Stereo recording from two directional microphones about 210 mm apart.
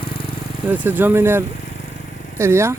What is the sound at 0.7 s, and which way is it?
Speech, 10° right (ahead or behind).